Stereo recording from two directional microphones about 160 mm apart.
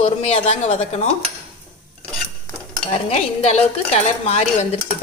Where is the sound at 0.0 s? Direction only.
40° left (ahead or behind).